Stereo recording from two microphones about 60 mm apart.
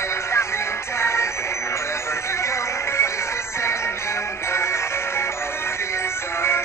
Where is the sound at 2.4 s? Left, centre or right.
Left.